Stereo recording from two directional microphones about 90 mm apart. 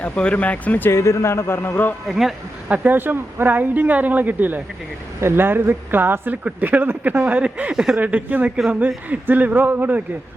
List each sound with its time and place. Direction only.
0.0 s speech: 15° left (ahead or behind)
0.9 s a man's voice: 30° left (ahead or behind)
2.0 s speech: 5° right (ahead or behind)
2.6 s speech: 20° right (ahead or behind)